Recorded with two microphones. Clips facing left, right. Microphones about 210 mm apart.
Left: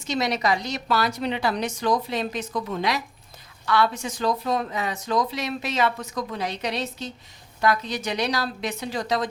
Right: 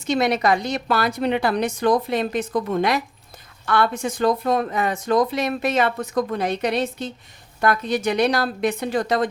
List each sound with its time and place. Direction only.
0.1 s a woman's voice: 55° right (ahead or behind)